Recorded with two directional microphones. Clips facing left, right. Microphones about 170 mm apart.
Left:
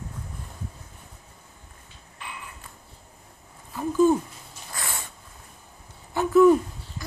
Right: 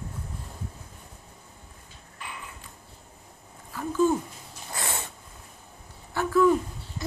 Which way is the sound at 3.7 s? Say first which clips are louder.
Left 4 dB; 15° left (ahead or behind).